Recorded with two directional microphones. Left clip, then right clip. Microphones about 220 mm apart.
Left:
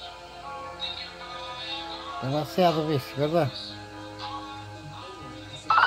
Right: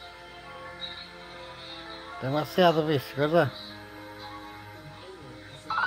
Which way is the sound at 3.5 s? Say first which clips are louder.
Left 4 dB; 60° left (ahead or behind).